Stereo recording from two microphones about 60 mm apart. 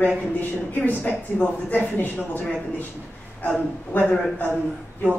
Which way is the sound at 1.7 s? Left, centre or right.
Left.